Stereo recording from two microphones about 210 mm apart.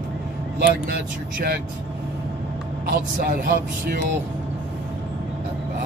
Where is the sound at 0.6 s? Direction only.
45° right (ahead or behind).